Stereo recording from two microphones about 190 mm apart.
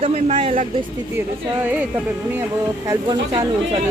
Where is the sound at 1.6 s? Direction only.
10° right (ahead or behind).